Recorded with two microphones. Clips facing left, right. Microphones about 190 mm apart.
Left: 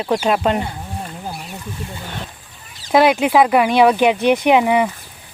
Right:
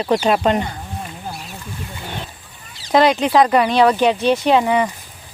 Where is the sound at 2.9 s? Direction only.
5° left (ahead or behind).